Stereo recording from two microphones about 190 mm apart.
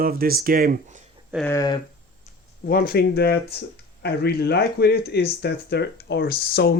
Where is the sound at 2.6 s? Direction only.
50° left (ahead or behind).